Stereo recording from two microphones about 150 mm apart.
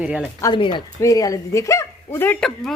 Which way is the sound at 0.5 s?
35° left (ahead or behind).